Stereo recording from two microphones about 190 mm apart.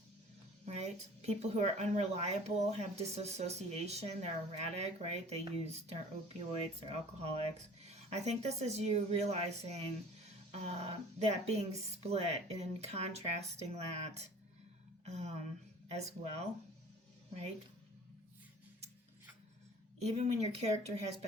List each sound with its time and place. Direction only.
0.6 s a woman's voice: 35° right (ahead or behind)
20.0 s a woman's voice: 35° right (ahead or behind)